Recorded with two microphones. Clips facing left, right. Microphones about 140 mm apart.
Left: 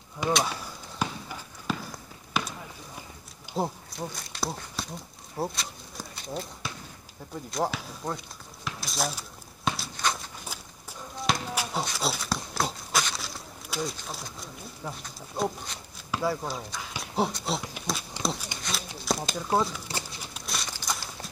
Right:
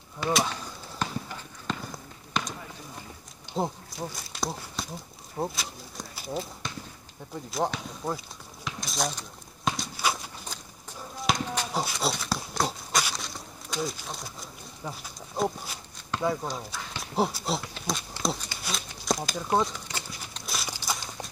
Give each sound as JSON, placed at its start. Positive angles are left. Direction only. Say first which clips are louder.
{"t": 0.5, "sound": "basketball bounce", "louder": "even", "side_deg": 10}
{"t": 3.5, "sound": "speech", "louder": "even", "side_deg": 0}
{"t": 5.4, "sound": "pigeon", "louder": "even", "side_deg": 0}
{"t": 6.6, "sound": "basketball bounce", "louder": "right 1 dB", "side_deg": 5}
{"t": 7.5, "sound": "speech", "louder": "even", "side_deg": 0}
{"t": 8.6, "sound": "a sound", "louder": "even", "side_deg": 0}
{"t": 9.7, "sound": "walk", "louder": "right 1 dB", "side_deg": -5}
{"t": 10.4, "sound": "a sound", "louder": "even", "side_deg": 10}
{"t": 16.1, "sound": "speech", "louder": "even", "side_deg": 5}
{"t": 17.9, "sound": "pig", "louder": "right 1 dB", "side_deg": 0}
{"t": 18.2, "sound": "a sound", "louder": "right 1 dB", "side_deg": 0}
{"t": 19.9, "sound": "bird", "louder": "left 2 dB", "side_deg": 30}
{"t": 20.3, "sound": "walk", "louder": "right 1 dB", "side_deg": 0}